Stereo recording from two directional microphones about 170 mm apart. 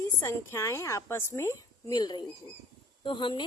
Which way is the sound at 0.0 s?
15° left (ahead or behind).